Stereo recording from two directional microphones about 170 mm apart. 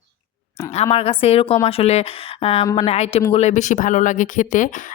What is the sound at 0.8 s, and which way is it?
Speech, 40° left (ahead or behind).